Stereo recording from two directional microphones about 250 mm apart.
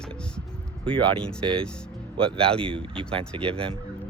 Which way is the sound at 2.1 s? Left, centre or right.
Right.